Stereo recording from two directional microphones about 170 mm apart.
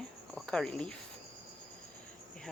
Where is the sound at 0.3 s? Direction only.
5° left (ahead or behind).